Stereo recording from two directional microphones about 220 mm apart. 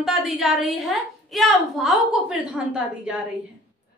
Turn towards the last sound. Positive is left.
turn(degrees=-5)  # may be behind; listen again after turning